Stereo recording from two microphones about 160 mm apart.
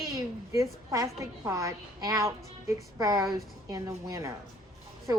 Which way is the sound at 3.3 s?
25° right (ahead or behind).